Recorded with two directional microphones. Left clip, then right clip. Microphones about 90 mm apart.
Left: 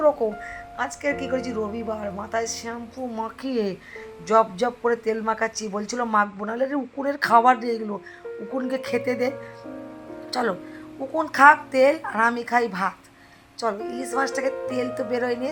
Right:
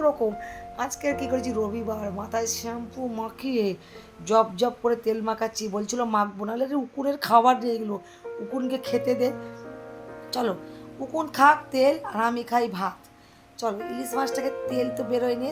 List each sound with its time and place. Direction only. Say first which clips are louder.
0.0 s a woman's voice: left 3 dB; 40° right (ahead or behind)
3.2 s speech: right 1 dB; 15° right (ahead or behind)
10.3 s a woman's voice: left 2 dB; 10° right (ahead or behind)